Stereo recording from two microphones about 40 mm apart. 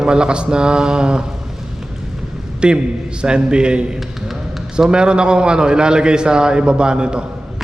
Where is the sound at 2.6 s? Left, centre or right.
Right.